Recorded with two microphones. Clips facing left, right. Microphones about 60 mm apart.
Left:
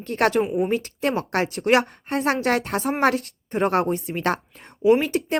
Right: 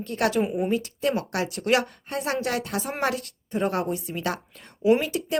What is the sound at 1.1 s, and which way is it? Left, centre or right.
A woman's voice, left.